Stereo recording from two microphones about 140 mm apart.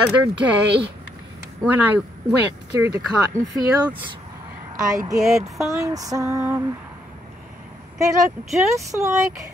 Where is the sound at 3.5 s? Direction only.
35° right (ahead or behind).